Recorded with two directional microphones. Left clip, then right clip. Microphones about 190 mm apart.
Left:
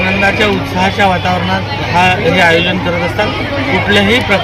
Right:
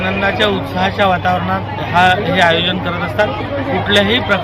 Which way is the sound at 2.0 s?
5° right (ahead or behind).